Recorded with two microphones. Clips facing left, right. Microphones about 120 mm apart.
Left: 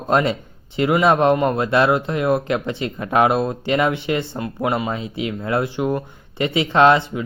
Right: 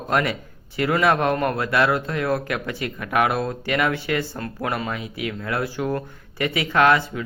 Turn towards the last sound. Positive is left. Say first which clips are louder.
# left 4 dB
turn(degrees=25)  # may be behind; listen again after turning